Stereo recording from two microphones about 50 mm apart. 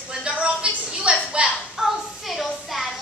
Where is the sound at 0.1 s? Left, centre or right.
Centre.